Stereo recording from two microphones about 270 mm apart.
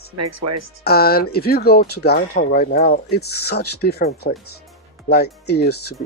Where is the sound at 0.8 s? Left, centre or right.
Left.